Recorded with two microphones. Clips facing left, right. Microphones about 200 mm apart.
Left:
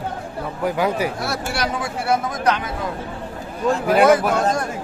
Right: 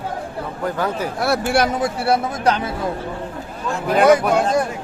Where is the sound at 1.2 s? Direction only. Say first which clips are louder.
Right 7 dB; 55° right (ahead or behind).